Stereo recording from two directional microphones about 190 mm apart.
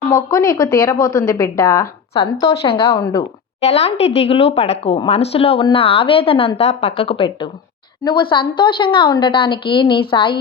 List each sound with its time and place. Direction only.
0.3 s a woman's voice: 20° left (ahead or behind)
0.9 s a woman's voice: 45° left (ahead or behind)
1.3 s a woman's voice: 15° left (ahead or behind)